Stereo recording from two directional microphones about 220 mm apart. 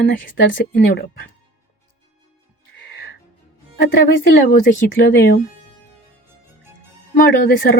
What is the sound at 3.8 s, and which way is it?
Speech, 45° left (ahead or behind).